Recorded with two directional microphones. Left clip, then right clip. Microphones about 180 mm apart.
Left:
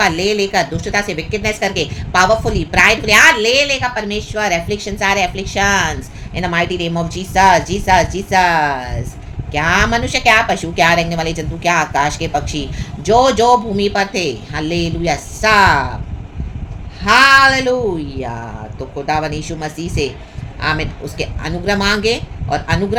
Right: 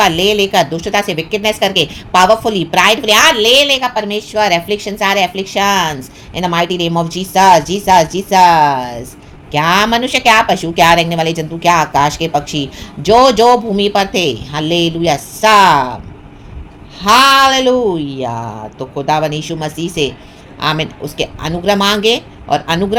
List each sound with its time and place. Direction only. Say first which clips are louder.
0.0 s speech: right 4 dB; 30° right (ahead or behind)
17.0 s speech: right 1 dB; 35° right (ahead or behind)